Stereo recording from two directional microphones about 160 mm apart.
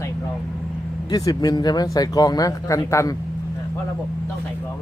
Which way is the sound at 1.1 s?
25° left (ahead or behind).